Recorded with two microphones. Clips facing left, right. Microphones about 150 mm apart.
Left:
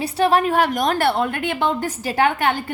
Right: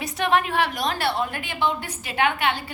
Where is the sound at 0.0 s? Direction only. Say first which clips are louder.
Left 5 dB; 30° left (ahead or behind).